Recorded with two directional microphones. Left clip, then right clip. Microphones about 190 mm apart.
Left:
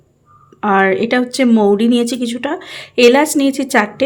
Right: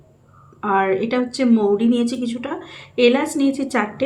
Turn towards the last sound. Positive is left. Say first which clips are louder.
# left 7 dB
turn(degrees=55)  # may be behind; listen again after turning